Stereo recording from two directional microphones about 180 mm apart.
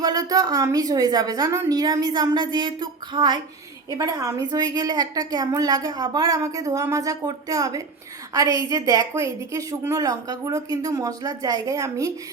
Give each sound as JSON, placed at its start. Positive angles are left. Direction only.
{"t": 0.0, "sound": "a woman's voice", "side_deg": -20}